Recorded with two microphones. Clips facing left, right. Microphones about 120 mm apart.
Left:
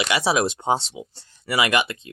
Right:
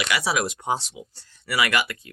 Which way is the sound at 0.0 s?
25° left (ahead or behind).